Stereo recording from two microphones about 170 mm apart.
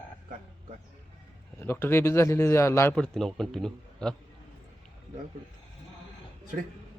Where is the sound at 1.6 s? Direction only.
15° left (ahead or behind).